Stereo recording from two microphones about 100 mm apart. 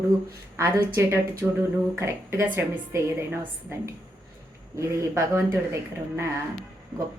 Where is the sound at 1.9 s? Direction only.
20° right (ahead or behind).